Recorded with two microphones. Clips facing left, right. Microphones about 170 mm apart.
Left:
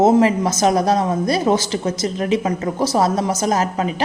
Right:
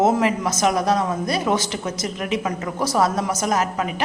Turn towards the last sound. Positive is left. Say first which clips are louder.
# left 3 dB
turn(degrees=30)  # may be behind; listen again after turning